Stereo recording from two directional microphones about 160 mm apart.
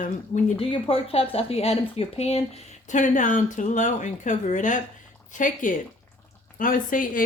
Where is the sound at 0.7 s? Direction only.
35° left (ahead or behind).